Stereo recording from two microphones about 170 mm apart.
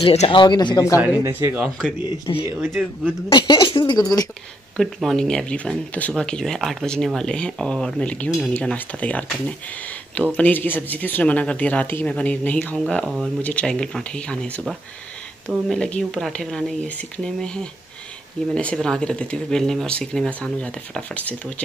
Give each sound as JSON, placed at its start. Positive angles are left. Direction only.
{"t": 0.0, "sound": "speech", "side_deg": 35}
{"t": 0.9, "sound": "speech", "side_deg": -10}
{"t": 2.0, "sound": "speech", "side_deg": 25}
{"t": 4.7, "sound": "speech", "side_deg": 5}
{"t": 10.3, "sound": "speech", "side_deg": 10}